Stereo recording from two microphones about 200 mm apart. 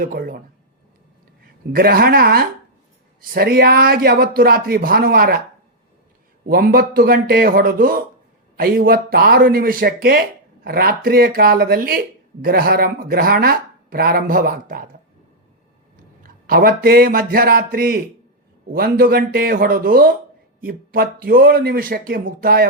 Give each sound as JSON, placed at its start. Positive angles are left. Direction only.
{"t": 0.0, "sound": "speech", "side_deg": -45}
{"t": 1.7, "sound": "speech", "side_deg": -50}
{"t": 6.5, "sound": "speech", "side_deg": -50}
{"t": 16.2, "sound": "speech", "side_deg": -45}